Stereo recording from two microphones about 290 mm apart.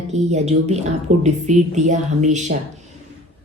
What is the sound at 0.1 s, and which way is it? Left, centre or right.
Speech, right.